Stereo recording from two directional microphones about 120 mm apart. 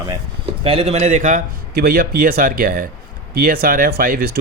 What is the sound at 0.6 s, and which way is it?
Speech, 55° right (ahead or behind).